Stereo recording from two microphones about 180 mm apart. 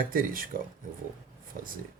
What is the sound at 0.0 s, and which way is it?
Speech, 50° right (ahead or behind).